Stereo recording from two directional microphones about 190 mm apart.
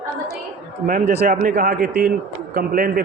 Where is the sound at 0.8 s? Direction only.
50° right (ahead or behind).